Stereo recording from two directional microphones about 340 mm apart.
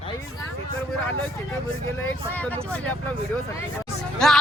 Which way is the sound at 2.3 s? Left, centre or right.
Centre.